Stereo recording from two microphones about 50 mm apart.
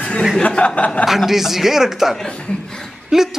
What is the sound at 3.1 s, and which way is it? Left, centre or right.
Speech, centre.